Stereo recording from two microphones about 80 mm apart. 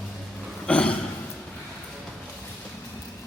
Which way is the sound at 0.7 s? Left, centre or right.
Centre.